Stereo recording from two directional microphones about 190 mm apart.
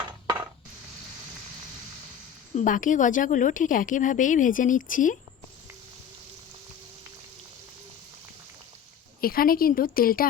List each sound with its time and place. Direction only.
2.6 s a woman's voice: 45° left (ahead or behind)
9.2 s a woman's voice: 50° left (ahead or behind)